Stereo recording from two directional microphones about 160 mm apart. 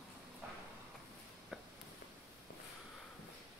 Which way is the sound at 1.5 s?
5° right (ahead or behind).